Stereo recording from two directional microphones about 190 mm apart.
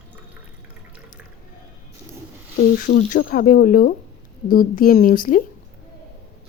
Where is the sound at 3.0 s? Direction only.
40° left (ahead or behind).